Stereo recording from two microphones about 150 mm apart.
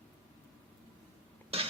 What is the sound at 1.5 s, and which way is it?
Music, 40° right (ahead or behind).